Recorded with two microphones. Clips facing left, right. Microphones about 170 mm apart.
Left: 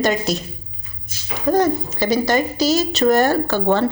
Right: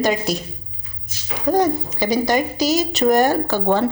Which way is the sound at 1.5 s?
15° right (ahead or behind).